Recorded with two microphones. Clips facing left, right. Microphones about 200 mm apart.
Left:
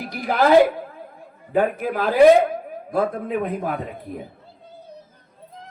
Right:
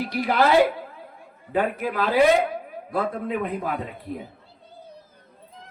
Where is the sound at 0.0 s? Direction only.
45° left (ahead or behind).